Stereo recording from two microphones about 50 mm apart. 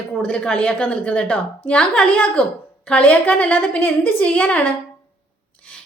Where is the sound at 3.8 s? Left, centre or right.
Left.